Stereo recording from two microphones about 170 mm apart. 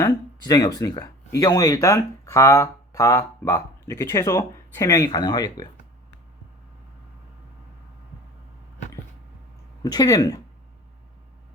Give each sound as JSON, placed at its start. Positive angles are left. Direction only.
{"t": 0.0, "sound": "speech", "side_deg": 20}
{"t": 9.8, "sound": "speech", "side_deg": 20}